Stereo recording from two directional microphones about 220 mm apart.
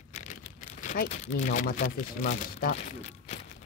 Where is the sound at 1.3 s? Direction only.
35° left (ahead or behind).